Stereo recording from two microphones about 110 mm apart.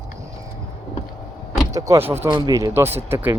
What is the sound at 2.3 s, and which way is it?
Speech, 35° right (ahead or behind).